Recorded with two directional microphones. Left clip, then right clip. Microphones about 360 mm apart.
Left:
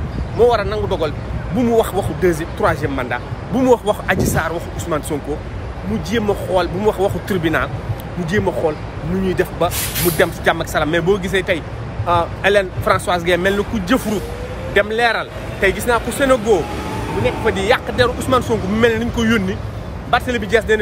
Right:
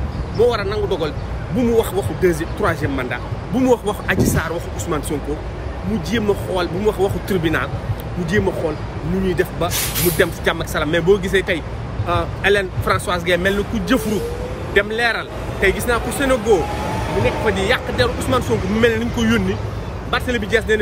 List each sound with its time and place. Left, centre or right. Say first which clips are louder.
0.4 s speech: left 3 dB; centre
6.0 s speech: left 1 dB; centre
16.5 s vehicle: right 1 dB; centre
17.5 s speech: left 2 dB; centre